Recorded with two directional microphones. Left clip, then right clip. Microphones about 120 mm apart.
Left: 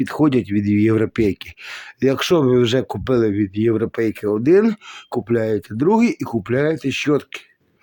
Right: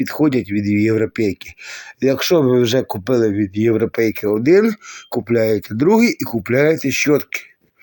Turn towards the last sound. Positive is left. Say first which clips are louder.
# right 3 dB
turn(degrees=15)  # may be behind; listen again after turning